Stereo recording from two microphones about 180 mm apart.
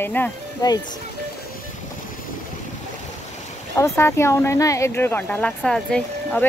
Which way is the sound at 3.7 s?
15° left (ahead or behind).